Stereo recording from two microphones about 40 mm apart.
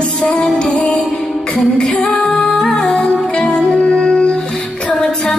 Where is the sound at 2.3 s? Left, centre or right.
Centre.